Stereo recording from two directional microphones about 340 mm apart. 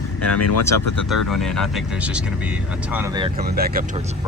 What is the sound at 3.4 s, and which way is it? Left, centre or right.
Speech, right.